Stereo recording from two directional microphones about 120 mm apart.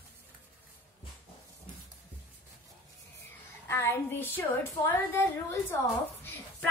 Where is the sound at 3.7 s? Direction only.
20° left (ahead or behind).